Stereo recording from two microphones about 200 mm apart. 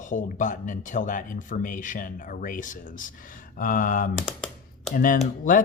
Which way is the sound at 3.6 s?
45° left (ahead or behind).